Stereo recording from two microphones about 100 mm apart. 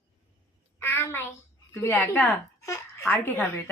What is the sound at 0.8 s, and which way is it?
A woman's voice, 25° left (ahead or behind).